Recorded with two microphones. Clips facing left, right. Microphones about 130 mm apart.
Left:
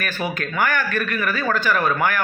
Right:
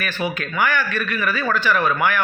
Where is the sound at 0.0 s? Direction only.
45° left (ahead or behind).